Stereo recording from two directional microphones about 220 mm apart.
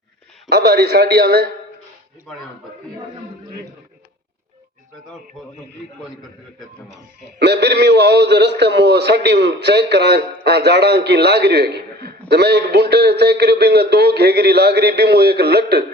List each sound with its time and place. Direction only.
0.5 s a man's voice: 50° right (ahead or behind)
6.8 s a man's voice: 55° right (ahead or behind)